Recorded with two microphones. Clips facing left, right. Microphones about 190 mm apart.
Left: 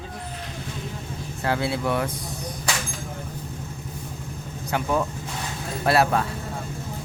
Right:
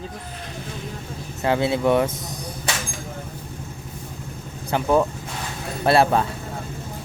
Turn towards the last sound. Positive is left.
turn(degrees=-25)  # may be behind; listen again after turning